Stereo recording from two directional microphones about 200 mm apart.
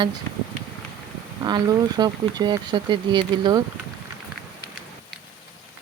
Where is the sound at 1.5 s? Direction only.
20° right (ahead or behind).